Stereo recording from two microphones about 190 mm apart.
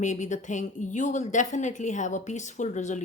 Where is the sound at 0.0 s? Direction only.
40° left (ahead or behind).